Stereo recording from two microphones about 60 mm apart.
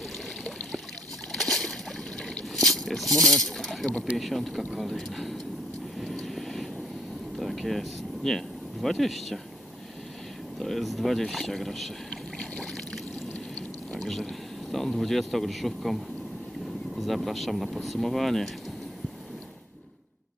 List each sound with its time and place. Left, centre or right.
1.3 s boat: centre
2.6 s speech: centre
6.2 s vehicle: centre
7.3 s speech: centre
10.6 s speech: centre
12.1 s boat: centre
14.0 s speech: centre
17.0 s speech: centre